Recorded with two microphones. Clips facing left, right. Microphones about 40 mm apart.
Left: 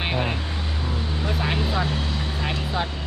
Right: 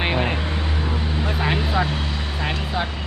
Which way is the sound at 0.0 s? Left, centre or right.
Centre.